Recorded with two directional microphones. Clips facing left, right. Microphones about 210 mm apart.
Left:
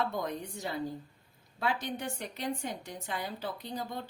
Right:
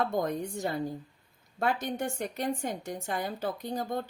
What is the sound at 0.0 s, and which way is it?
A woman's voice, 50° right (ahead or behind).